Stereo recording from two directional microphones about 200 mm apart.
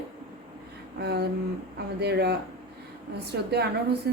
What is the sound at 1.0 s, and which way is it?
A woman's voice, 55° right (ahead or behind).